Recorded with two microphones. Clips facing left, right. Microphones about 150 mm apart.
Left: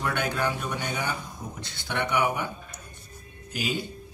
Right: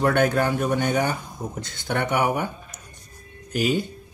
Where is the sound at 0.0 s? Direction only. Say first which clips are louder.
Right 8 dB; 45° right (ahead or behind).